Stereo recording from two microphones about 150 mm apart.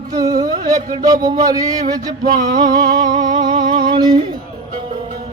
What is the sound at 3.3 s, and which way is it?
Music, 30° right (ahead or behind).